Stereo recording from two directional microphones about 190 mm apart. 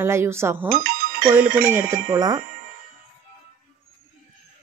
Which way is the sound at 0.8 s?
50° right (ahead or behind).